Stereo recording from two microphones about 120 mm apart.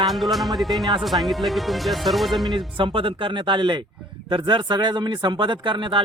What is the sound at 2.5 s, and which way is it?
Speech, 45° right (ahead or behind).